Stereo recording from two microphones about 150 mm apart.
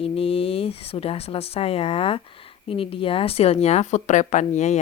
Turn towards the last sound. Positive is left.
turn(degrees=50)  # may be behind; listen again after turning